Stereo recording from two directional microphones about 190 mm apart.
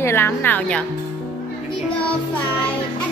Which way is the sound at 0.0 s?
10° left (ahead or behind).